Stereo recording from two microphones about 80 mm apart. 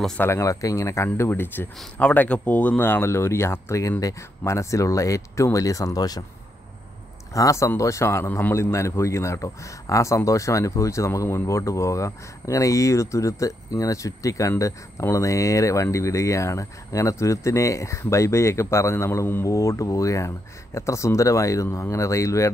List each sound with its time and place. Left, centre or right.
0.2 s a man's voice: left
2.0 s speech: centre; by 6.2 s left
7.3 s a man's voice: left
19.4 s a man's voice: left